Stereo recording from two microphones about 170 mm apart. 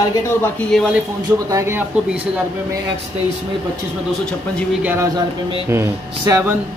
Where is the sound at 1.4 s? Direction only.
15° right (ahead or behind).